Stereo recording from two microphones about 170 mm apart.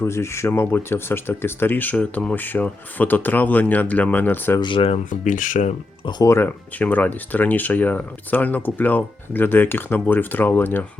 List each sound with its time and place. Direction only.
0.0 s speech: 15° left (ahead or behind)
4.6 s speech: 30° left (ahead or behind)
5.0 s speech: 50° left (ahead or behind)
6.1 s speech: 20° left (ahead or behind)